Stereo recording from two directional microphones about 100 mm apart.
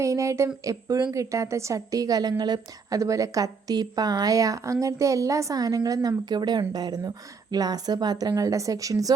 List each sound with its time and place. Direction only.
0.0 s a woman's voice: 30° right (ahead or behind)